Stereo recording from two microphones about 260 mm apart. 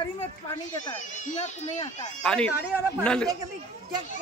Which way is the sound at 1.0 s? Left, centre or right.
Left.